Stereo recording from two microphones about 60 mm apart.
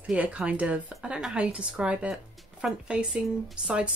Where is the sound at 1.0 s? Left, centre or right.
Centre.